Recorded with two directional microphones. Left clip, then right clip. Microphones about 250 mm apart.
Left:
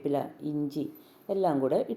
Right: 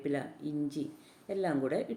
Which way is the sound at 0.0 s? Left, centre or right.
Centre.